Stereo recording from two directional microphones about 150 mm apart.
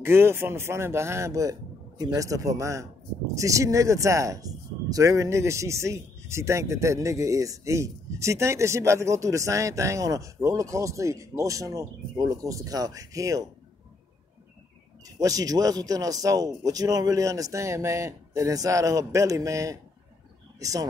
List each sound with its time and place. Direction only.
0.0 s speech: 15° right (ahead or behind)
15.1 s speech: 25° right (ahead or behind)